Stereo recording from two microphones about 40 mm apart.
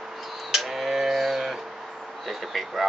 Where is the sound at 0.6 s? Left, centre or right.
Centre.